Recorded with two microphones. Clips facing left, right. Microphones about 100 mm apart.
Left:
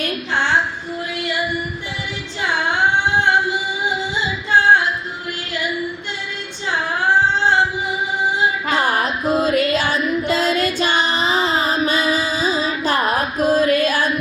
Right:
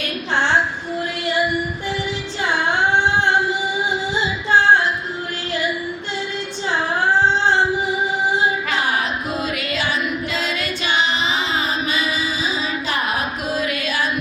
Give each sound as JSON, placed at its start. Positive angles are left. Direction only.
{"t": 8.7, "sound": "music", "side_deg": 40}
{"t": 10.2, "sound": "child singing", "side_deg": 40}